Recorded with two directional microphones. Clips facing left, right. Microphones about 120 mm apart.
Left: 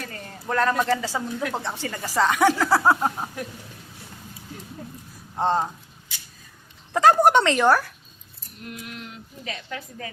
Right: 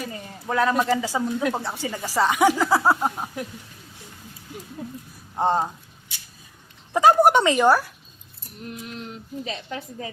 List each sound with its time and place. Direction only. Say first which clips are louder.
0.0 s speech: right 2 dB; 10° right (ahead or behind)
5.4 s speech: right 1 dB; 10° right (ahead or behind)
6.9 s speech: right 1 dB; 10° right (ahead or behind)
8.7 s speech: right 2 dB; 30° right (ahead or behind)